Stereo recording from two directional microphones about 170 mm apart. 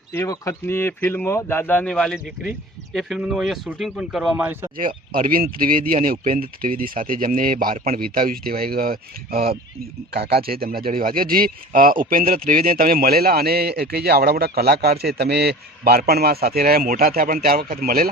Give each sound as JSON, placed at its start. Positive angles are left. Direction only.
{"t": 0.1, "sound": "speech", "side_deg": 20}
{"t": 4.8, "sound": "speech", "side_deg": -55}